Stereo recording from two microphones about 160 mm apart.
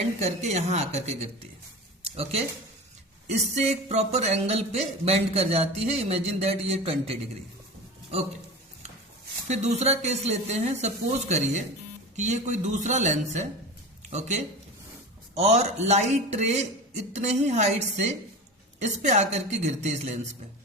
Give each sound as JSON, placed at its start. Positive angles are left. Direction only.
{"t": 0.2, "sound": "speech", "side_deg": -45}
{"t": 9.5, "sound": "speech", "side_deg": -45}